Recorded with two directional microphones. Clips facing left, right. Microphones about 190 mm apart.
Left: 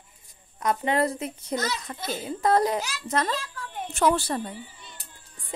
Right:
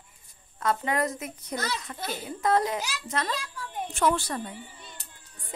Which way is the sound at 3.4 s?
10° right (ahead or behind).